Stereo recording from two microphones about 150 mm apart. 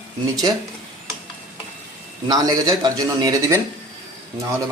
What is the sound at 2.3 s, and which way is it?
Speech, 25° right (ahead or behind).